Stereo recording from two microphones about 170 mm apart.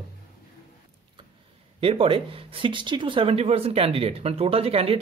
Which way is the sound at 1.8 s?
35° right (ahead or behind).